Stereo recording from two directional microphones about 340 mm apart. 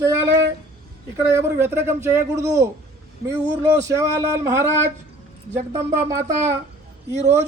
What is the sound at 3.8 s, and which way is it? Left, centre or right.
A man's voice, centre.